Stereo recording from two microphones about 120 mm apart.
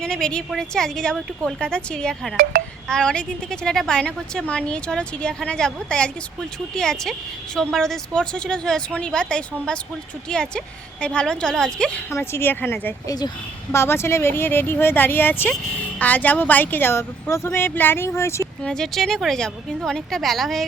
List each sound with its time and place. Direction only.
0.0 s a woman's voice: 5° left (ahead or behind)
12.1 s a woman's voice: 20° left (ahead or behind)
13.1 s speech: 35° left (ahead or behind)
13.7 s speech: 20° left (ahead or behind)
18.6 s speech: 5° left (ahead or behind)